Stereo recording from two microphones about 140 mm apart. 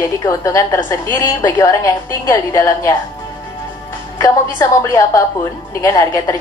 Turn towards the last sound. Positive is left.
turn(degrees=25)  # may be behind; listen again after turning